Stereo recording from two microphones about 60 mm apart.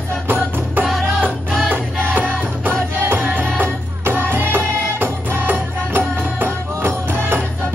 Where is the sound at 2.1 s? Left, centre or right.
Right.